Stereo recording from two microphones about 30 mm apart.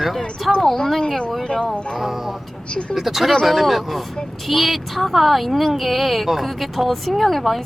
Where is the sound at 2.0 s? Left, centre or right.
Centre.